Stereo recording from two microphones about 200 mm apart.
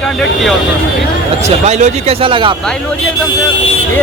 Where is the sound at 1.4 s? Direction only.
35° right (ahead or behind).